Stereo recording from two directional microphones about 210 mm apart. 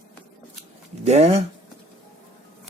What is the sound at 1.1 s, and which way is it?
Speech, 30° right (ahead or behind).